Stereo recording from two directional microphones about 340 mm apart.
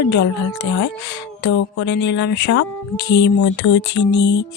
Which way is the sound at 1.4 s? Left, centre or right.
Left.